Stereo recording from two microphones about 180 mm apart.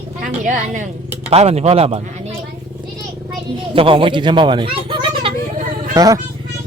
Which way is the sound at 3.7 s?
30° right (ahead or behind).